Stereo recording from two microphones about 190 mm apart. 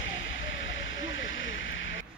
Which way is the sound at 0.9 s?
85° left.